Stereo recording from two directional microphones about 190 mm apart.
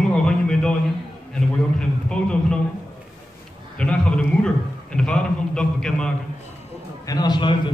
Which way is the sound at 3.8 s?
5° left (ahead or behind).